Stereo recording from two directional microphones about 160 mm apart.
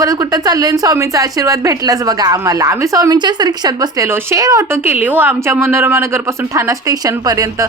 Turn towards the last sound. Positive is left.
turn(degrees=-20)  # may be behind; listen again after turning